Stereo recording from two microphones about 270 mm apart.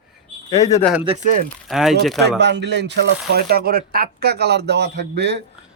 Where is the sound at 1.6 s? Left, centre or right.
Centre.